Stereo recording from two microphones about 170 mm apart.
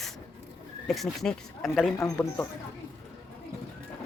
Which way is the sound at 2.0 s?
15° left (ahead or behind).